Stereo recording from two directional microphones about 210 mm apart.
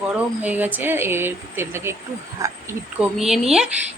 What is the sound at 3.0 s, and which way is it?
Speech, centre (ahead or behind).